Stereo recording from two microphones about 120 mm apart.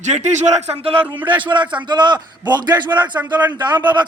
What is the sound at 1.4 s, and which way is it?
A man's voice, 40° right (ahead or behind).